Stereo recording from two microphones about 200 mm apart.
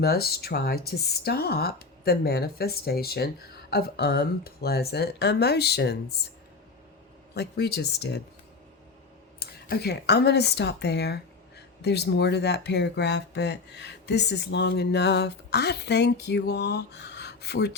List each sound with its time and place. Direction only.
0.0 s speech: 50° left (ahead or behind)
7.3 s speech: 55° left (ahead or behind)
9.4 s speech: 50° left (ahead or behind)